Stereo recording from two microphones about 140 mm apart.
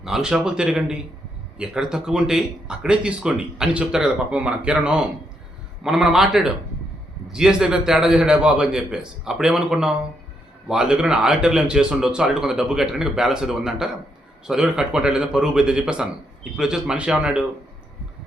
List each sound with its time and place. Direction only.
0.0 s speech: 5° right (ahead or behind)